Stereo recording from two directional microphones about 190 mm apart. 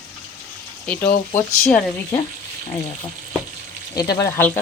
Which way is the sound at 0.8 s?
10° left (ahead or behind).